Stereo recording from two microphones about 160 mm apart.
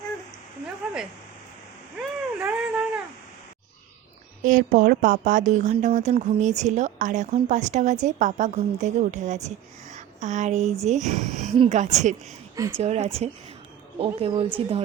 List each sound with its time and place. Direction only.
2.0 s a sound: 5° right (ahead or behind)
4.4 s a woman's voice: 55° right (ahead or behind)
9.9 s a sound: 50° right (ahead or behind)
10.8 s a woman's voice: 45° right (ahead or behind)
11.5 s a woman's voice: 35° right (ahead or behind)
11.8 s a woman's voice: 45° right (ahead or behind)
12.5 s speech: 20° right (ahead or behind)
12.8 s a woman's voice: 40° right (ahead or behind)